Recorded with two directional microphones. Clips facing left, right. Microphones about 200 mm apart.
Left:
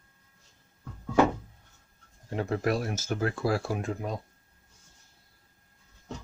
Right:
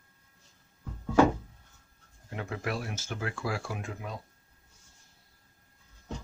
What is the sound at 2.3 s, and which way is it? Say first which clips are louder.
Speech: left 7 dB; 35° left (ahead or behind).